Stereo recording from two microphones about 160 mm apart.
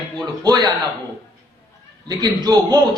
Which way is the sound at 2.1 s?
25° right (ahead or behind).